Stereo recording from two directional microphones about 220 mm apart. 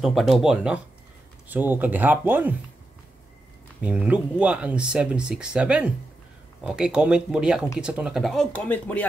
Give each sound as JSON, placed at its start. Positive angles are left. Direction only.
{"t": 0.0, "sound": "speech", "side_deg": 0}
{"t": 3.8, "sound": "speech", "side_deg": -5}